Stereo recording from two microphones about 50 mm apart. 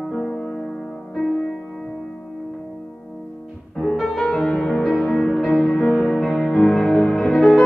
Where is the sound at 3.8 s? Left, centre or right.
Centre.